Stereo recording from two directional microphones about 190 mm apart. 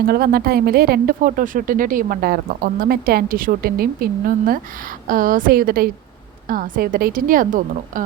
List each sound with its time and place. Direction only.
0.1 s speech: 50° right (ahead or behind)